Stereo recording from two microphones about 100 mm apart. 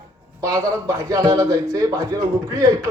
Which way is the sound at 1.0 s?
35° right (ahead or behind).